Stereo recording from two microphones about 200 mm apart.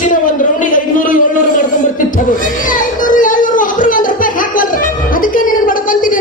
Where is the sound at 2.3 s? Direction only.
40° left (ahead or behind).